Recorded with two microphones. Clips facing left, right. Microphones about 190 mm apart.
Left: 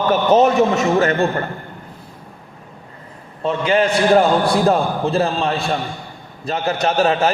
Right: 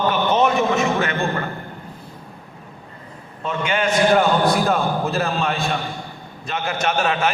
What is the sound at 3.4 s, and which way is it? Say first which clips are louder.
A man's voice: left 5 dB; 35° left (ahead or behind).